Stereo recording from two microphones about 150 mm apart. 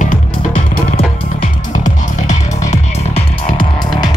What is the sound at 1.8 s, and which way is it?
Music, 55° left (ahead or behind).